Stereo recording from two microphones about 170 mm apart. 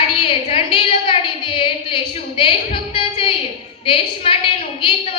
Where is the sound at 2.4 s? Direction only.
30° left (ahead or behind).